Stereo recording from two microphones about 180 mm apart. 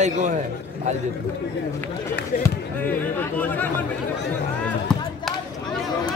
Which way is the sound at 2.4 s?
10° left (ahead or behind).